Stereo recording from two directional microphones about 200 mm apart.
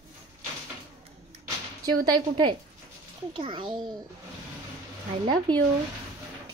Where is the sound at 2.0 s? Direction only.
25° right (ahead or behind).